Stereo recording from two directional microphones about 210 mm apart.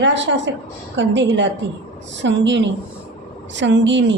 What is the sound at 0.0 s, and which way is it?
A woman's voice, 60° right (ahead or behind).